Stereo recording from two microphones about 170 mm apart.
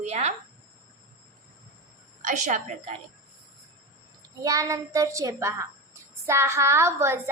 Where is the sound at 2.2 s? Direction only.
45° right (ahead or behind).